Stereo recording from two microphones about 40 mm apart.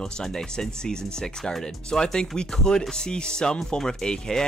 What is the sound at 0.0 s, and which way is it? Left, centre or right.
Speech, centre.